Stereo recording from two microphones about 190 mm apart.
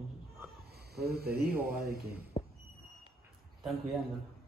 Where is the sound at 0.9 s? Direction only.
55° right (ahead or behind).